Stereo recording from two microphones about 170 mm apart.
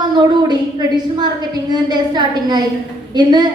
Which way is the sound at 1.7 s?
25° right (ahead or behind).